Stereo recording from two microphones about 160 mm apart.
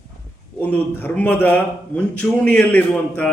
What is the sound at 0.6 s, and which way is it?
A man's voice, 10° left (ahead or behind).